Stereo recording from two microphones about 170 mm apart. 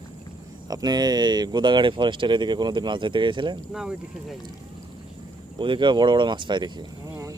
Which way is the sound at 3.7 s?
5° right (ahead or behind).